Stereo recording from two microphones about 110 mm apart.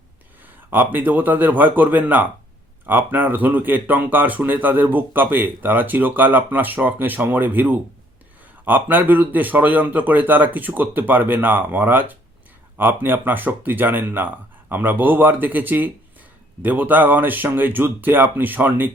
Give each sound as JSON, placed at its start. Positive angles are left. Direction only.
{"t": 0.4, "sound": "speech", "side_deg": -15}